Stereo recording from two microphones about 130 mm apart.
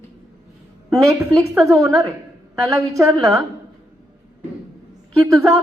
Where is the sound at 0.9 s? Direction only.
25° right (ahead or behind).